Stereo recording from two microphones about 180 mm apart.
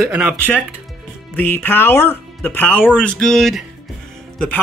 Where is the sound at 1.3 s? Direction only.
10° left (ahead or behind).